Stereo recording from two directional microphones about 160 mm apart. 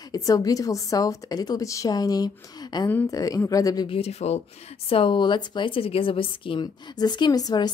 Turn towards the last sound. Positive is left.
turn(degrees=25)  # may be behind; listen again after turning